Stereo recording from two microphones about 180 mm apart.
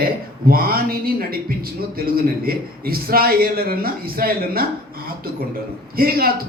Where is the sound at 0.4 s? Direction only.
55° right (ahead or behind).